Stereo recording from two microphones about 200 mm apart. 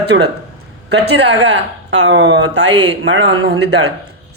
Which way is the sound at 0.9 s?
60° right (ahead or behind).